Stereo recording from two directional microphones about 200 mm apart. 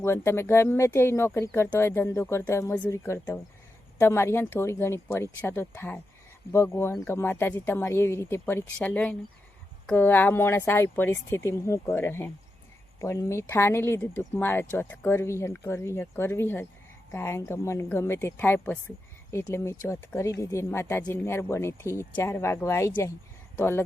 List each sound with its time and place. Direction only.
0.0 s speech: 10° left (ahead or behind)